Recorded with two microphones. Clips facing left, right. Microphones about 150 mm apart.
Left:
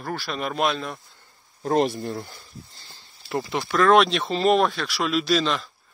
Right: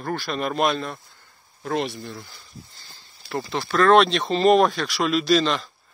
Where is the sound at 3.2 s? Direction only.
15° left (ahead or behind).